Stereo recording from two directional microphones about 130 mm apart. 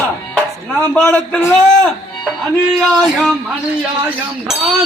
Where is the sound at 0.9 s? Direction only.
10° left (ahead or behind).